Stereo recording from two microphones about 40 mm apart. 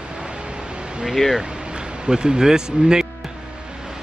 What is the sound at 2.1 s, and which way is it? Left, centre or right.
Speech, centre.